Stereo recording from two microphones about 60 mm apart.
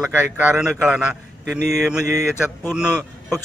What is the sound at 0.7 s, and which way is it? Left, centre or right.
A man's voice, centre.